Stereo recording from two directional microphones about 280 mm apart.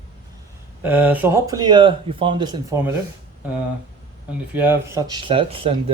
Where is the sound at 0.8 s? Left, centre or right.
Centre.